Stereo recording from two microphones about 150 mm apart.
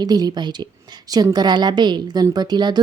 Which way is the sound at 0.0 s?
25° right (ahead or behind).